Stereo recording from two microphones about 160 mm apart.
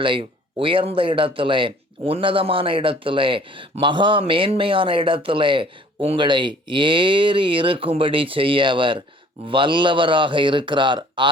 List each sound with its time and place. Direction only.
0.0 s speech: 30° right (ahead or behind)